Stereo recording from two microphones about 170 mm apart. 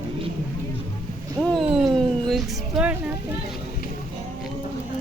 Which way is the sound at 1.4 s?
5° left (ahead or behind).